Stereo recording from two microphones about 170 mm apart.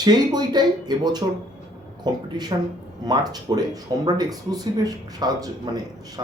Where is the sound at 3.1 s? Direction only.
25° right (ahead or behind).